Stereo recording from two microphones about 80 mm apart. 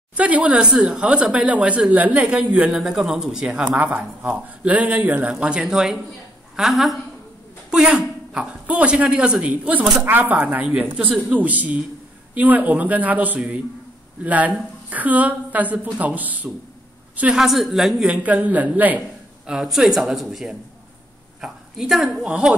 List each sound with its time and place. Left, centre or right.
0.2 s a woman's voice: centre
17.2 s a woman's voice: centre
18.1 s speech: centre
18.9 s a man's voice: centre